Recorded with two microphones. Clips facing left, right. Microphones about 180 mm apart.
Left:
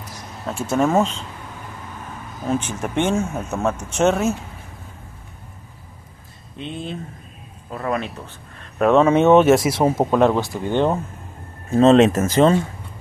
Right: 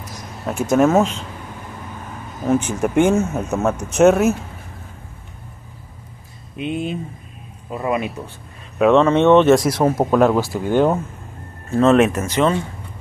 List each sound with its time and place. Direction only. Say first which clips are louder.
0.7 s speech: right 3 dB; 5° right (ahead or behind)
2.4 s speech: right 5 dB; 10° right (ahead or behind)
6.5 s speech: right 6 dB; 10° right (ahead or behind)
8.7 s speech: right 1 dB; centre (ahead or behind)
11.7 s speech: left 1 dB; 25° left (ahead or behind)
12.1 s speech: left 3 dB; 45° left (ahead or behind)